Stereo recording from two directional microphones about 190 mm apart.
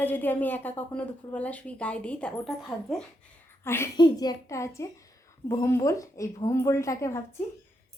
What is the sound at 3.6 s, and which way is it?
A woman's voice, 15° left (ahead or behind).